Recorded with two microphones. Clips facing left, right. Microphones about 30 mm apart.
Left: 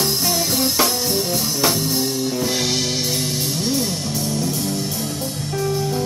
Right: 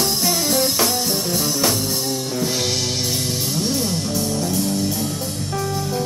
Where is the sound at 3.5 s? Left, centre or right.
Centre.